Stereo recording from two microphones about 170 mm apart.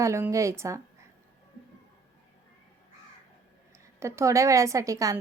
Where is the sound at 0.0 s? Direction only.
15° right (ahead or behind).